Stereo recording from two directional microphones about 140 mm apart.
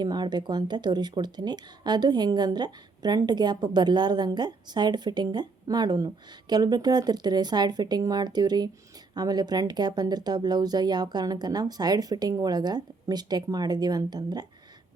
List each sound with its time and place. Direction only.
0.0 s speech: 30° right (ahead or behind)